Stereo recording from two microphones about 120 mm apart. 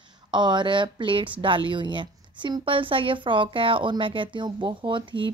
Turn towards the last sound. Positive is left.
turn(degrees=-45)  # may be behind; listen again after turning